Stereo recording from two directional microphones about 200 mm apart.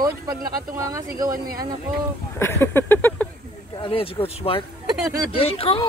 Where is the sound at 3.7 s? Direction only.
25° left (ahead or behind).